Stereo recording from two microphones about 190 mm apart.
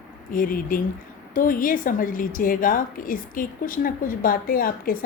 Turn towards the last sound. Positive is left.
turn(degrees=50)  # may be behind; listen again after turning